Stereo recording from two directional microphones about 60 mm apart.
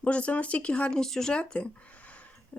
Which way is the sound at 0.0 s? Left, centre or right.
Left.